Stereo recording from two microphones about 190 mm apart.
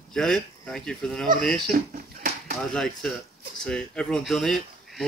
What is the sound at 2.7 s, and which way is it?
Speech, 5° left (ahead or behind).